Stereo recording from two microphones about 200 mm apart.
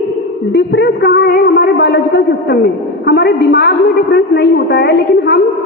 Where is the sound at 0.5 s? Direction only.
55° left (ahead or behind).